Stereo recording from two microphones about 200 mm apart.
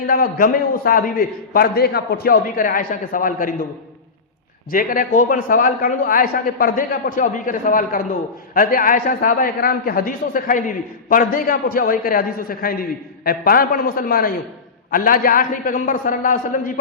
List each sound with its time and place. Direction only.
0.1 s a man's voice: 45° left (ahead or behind)
4.7 s a man's voice: 45° left (ahead or behind)